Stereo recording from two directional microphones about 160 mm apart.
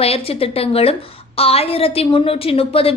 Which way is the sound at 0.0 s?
40° left (ahead or behind).